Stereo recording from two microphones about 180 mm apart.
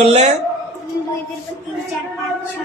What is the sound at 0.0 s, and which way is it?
Speech, 35° right (ahead or behind).